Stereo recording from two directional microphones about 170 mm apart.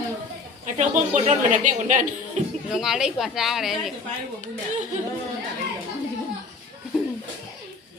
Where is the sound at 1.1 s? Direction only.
45° right (ahead or behind).